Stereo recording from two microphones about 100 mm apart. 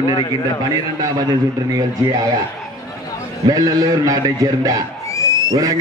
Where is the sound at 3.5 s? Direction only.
35° right (ahead or behind).